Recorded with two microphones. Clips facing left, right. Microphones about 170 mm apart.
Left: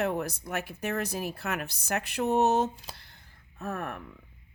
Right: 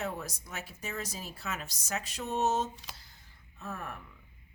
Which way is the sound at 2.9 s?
60° left (ahead or behind).